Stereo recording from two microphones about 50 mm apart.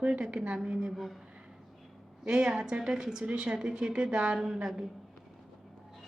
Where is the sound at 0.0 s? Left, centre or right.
Right.